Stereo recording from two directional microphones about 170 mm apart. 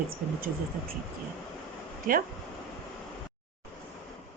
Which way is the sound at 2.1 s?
50° right (ahead or behind).